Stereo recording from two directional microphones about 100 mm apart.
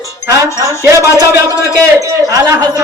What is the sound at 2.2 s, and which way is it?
Speech, 40° right (ahead or behind).